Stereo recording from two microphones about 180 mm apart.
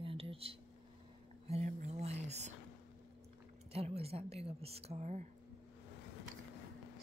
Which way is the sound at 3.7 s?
35° right (ahead or behind).